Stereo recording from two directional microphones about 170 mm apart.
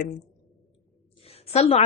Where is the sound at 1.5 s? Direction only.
40° left (ahead or behind).